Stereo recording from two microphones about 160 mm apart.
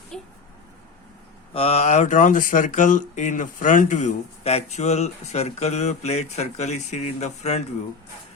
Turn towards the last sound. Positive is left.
turn(degrees=45)  # may be behind; listen again after turning